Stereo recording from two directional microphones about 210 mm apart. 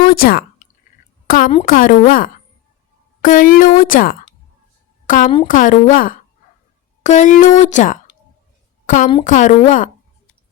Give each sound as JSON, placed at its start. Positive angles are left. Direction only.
{"t": 0.0, "sound": "a woman's voice", "side_deg": 45}